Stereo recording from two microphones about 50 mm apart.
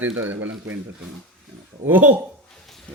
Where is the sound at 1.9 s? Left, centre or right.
Right.